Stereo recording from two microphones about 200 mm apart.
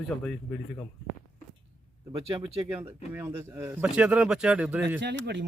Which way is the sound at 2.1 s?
25° right (ahead or behind).